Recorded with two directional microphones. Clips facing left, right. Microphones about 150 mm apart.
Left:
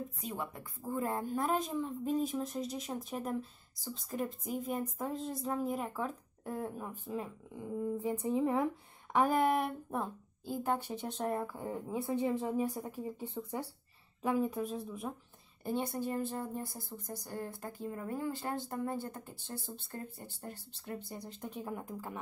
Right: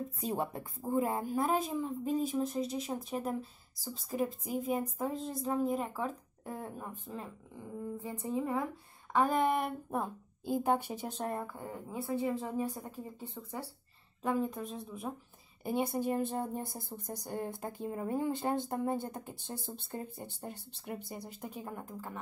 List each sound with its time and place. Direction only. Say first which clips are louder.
0.2 s a woman's voice: right 6 dB; 35° right (ahead or behind)
0.9 s speech: right 3 dB; 10° right (ahead or behind); by 8.6 s 20° left (ahead or behind)
9.1 s speech: even; 10° left (ahead or behind)
10.4 s a woman's voice: right 4 dB; 20° right (ahead or behind); by 11.5 s centre (ahead or behind)
11.5 s a woman's voice: left 3 dB; 15° left (ahead or behind)
15.6 s speech: right 3 dB; 10° right (ahead or behind)
21.8 s a woman's voice: left 1 dB; 10° left (ahead or behind)